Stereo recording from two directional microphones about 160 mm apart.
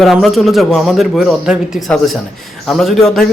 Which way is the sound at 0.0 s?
Centre (ahead or behind).